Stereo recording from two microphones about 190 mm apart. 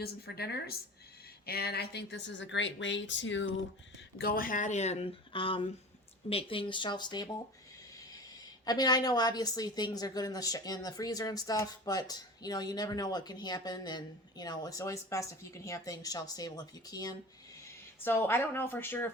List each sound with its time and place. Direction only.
0.0 s a woman's voice: 55° left (ahead or behind); by 3.5 s 75° left (ahead or behind)
4.2 s a woman's voice: 50° left (ahead or behind); by 7.4 s 20° left (ahead or behind)
8.6 s a woman's voice: 20° left (ahead or behind)